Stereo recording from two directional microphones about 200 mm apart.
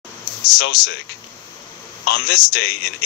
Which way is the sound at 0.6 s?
50° left (ahead or behind).